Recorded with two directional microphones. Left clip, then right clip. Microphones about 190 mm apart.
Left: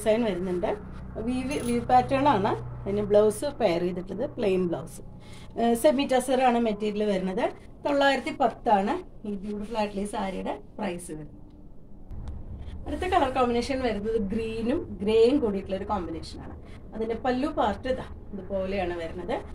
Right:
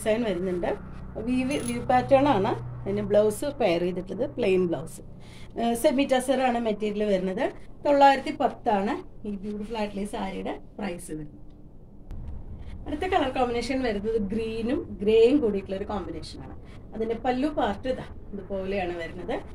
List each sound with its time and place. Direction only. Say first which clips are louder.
0.0 s a woman's voice: left 1 dB; 20° right (ahead or behind)
12.8 s a woman's voice: left 1 dB; 15° right (ahead or behind)